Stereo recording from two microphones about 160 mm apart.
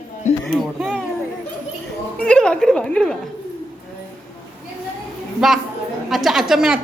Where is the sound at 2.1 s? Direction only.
5° left (ahead or behind).